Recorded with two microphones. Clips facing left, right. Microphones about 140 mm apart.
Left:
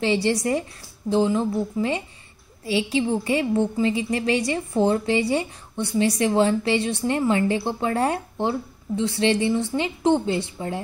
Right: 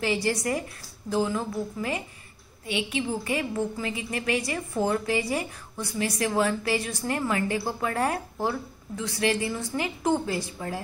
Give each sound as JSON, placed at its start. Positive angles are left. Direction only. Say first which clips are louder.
{"t": 0.0, "sound": "a woman's voice", "louder": "left 5 dB", "side_deg": 30}